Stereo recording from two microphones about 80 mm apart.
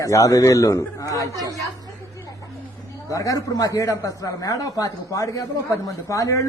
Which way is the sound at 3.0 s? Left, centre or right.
Left.